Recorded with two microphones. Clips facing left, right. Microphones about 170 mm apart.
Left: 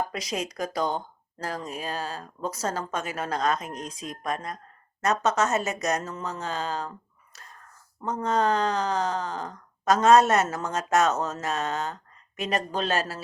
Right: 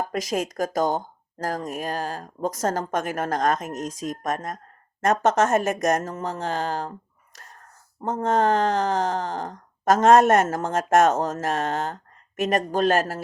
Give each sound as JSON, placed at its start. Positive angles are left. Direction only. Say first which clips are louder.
{"t": 0.1, "sound": "speech", "louder": "right 6 dB", "side_deg": -50}
{"t": 8.0, "sound": "speech", "louder": "right 3 dB", "side_deg": -50}